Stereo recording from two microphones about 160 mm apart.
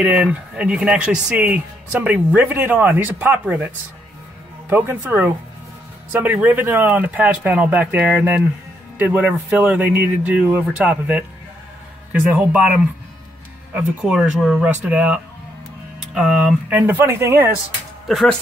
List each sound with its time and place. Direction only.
0.0 s speech: 10° right (ahead or behind)
16.2 s speech: 5° right (ahead or behind)
18.0 s speech: centre (ahead or behind)